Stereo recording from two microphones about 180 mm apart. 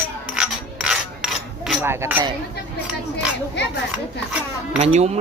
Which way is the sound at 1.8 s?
10° right (ahead or behind).